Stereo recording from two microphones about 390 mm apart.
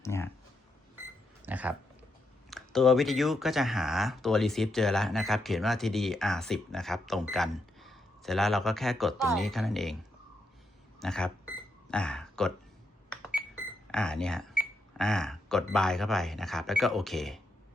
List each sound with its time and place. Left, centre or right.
0.0 s speech: centre
1.4 s a sound: centre
2.5 s speech: centre
11.0 s speech: centre
13.9 s speech: centre